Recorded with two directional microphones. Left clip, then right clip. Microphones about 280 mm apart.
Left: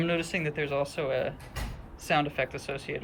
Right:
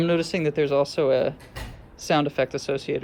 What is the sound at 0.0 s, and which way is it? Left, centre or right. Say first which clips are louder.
Speech: right 6 dB; centre.